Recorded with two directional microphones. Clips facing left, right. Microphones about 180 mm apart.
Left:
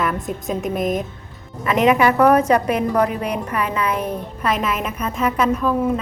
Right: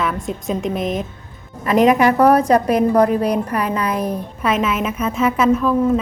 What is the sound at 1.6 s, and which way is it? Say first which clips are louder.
A woman's voice: right 2 dB; 40° right (ahead or behind).